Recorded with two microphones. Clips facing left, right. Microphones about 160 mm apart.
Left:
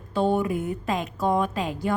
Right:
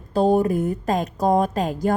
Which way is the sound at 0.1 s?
40° right (ahead or behind).